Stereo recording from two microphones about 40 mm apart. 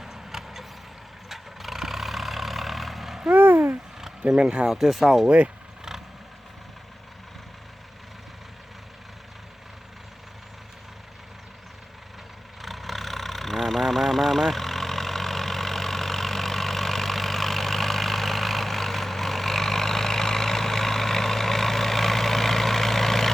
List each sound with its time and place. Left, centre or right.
0.0 s vehicle: centre
3.3 s a sound: right
4.3 s speech: right
4.7 s speech: centre
12.6 s vehicle: centre